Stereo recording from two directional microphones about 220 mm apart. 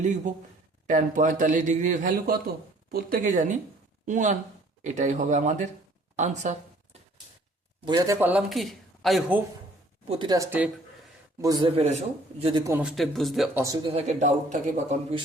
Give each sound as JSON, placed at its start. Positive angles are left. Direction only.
{"t": 0.9, "sound": "a man's voice", "side_deg": -35}
{"t": 7.9, "sound": "a man's voice", "side_deg": -15}
{"t": 10.1, "sound": "a man's voice", "side_deg": -20}
{"t": 12.7, "sound": "a man's voice", "side_deg": 0}
{"t": 13.6, "sound": "speech", "side_deg": -15}
{"t": 13.9, "sound": "a man's voice", "side_deg": -30}